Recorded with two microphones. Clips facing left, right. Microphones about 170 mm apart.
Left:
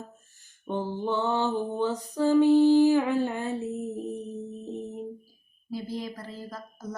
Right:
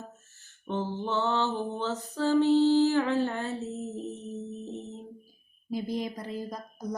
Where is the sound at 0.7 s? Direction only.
15° left (ahead or behind).